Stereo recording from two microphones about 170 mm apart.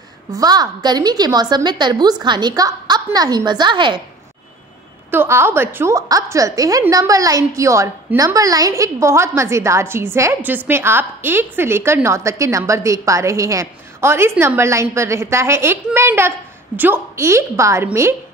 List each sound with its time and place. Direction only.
0.3 s a woman's voice: 20° right (ahead or behind)
5.1 s a woman's voice: 15° right (ahead or behind)